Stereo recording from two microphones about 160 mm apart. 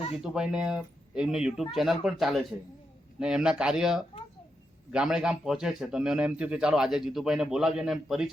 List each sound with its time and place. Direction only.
0.2 s a man's voice: 5° right (ahead or behind)